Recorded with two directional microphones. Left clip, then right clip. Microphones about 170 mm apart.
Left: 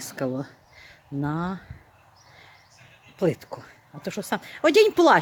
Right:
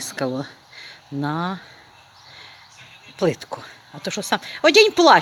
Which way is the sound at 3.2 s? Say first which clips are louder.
Right 4 dB; centre (ahead or behind).